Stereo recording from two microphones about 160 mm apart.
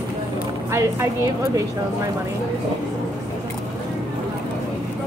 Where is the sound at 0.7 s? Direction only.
20° right (ahead or behind).